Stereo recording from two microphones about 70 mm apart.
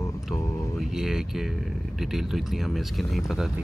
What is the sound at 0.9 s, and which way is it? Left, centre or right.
Speech, centre.